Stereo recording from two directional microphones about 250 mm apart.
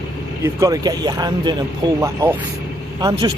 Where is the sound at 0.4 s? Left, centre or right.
Centre.